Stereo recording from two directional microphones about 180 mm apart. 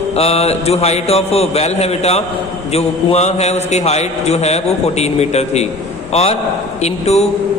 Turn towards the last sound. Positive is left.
turn(degrees=35)  # may be behind; listen again after turning